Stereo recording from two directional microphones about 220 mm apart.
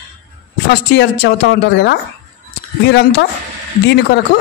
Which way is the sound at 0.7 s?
50° left (ahead or behind).